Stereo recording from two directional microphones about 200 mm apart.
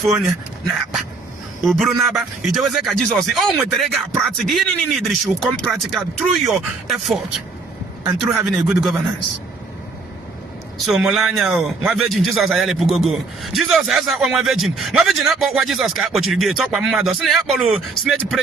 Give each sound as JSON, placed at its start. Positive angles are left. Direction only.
{"t": 1.6, "sound": "a man's voice", "side_deg": 0}
{"t": 10.8, "sound": "a man's voice", "side_deg": 0}